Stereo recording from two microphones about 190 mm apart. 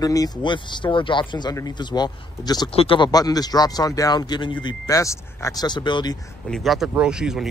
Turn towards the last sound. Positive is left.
turn(degrees=-5)  # may be behind; listen again after turning